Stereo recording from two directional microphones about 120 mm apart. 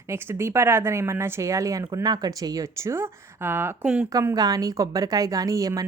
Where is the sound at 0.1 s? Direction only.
20° right (ahead or behind).